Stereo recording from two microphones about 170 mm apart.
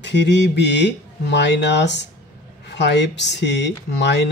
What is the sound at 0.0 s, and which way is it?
Speech, 90° left.